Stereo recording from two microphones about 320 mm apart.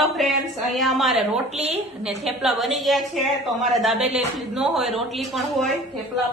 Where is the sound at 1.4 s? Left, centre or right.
Centre.